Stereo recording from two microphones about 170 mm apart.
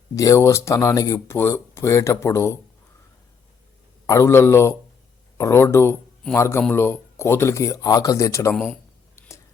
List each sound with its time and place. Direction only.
0.2 s speech: 20° left (ahead or behind)
4.0 s speech: 15° left (ahead or behind)
8.5 s a man's voice: 5° left (ahead or behind)